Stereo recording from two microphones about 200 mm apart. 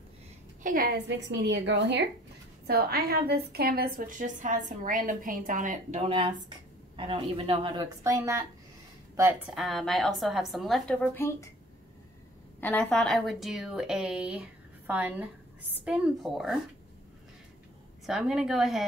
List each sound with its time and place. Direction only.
0.7 s a woman's voice: 45° right (ahead or behind)
1.0 s a woman's voice: 60° right (ahead or behind); by 9.4 s 10° right (ahead or behind)
9.5 s a woman's voice: centre (ahead or behind)
12.5 s a woman's voice: 10° left (ahead or behind)
18.0 s a woman's voice: centre (ahead or behind)